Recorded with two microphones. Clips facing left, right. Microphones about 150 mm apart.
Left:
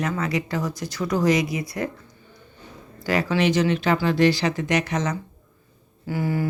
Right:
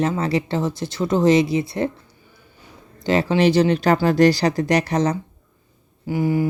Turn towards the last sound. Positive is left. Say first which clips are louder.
# right 5 dB
turn(degrees=-15)  # may be behind; listen again after turning